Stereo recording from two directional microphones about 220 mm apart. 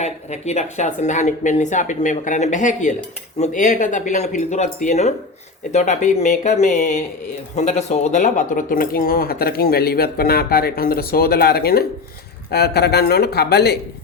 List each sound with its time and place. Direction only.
0.0 s speech: 30° left (ahead or behind); by 13.7 s 45° left (ahead or behind)